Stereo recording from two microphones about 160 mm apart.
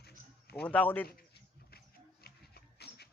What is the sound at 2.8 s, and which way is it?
Printer, 90° left.